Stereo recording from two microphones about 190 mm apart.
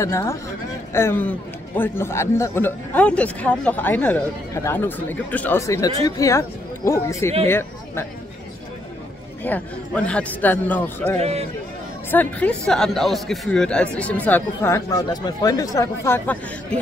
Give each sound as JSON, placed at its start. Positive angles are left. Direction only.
{"t": 0.0, "sound": "speech", "side_deg": 15}
{"t": 9.4, "sound": "speech", "side_deg": 5}
{"t": 11.1, "sound": "a man's voice", "side_deg": -35}
{"t": 12.1, "sound": "speech", "side_deg": 10}